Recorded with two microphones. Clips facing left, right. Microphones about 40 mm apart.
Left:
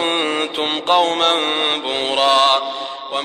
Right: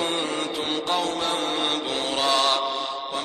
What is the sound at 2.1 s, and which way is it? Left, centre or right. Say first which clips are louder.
Mantra: left 8 dB; left.